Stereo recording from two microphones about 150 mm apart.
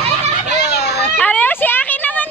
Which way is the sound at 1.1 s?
10° left (ahead or behind).